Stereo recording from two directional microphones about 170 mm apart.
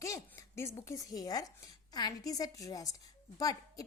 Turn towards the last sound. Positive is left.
turn(degrees=20)  # may be behind; listen again after turning